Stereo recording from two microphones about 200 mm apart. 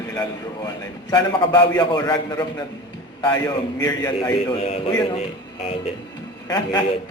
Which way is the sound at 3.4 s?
15° left (ahead or behind).